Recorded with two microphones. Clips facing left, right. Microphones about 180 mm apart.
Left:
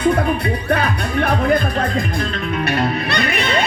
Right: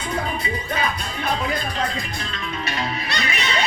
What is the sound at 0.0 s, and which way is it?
Music, 60° left (ahead or behind).